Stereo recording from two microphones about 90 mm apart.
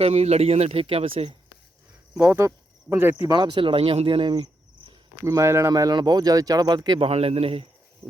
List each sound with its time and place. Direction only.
0.4 s speech: 90° right
2.1 s speech: 25° right (ahead or behind)
3.2 s speech: 60° right (ahead or behind); by 4.4 s 75° right (ahead or behind)
5.2 s speech: 35° right (ahead or behind)
5.7 s speech: 50° right (ahead or behind); by 7.7 s 90° right